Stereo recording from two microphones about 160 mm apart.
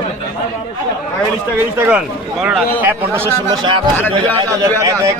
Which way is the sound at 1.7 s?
10° right (ahead or behind).